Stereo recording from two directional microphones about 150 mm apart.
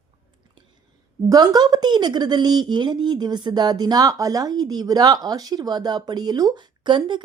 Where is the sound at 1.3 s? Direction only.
25° right (ahead or behind).